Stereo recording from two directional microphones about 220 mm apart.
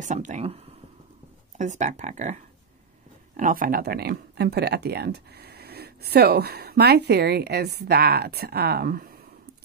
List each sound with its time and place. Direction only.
0.0 s speech: 35° right (ahead or behind)
1.6 s speech: 35° right (ahead or behind)